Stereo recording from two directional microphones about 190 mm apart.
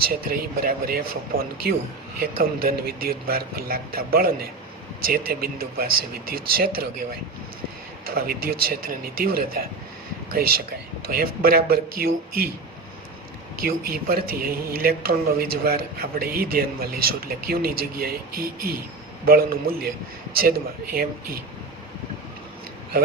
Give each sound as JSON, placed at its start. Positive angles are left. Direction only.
{"t": 0.0, "sound": "a man's voice", "side_deg": -50}
{"t": 8.0, "sound": "a man's voice", "side_deg": -50}
{"t": 13.6, "sound": "a man's voice", "side_deg": -50}